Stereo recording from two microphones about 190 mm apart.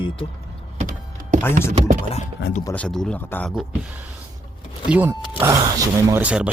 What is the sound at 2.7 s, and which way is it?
Speech, 5° left (ahead or behind).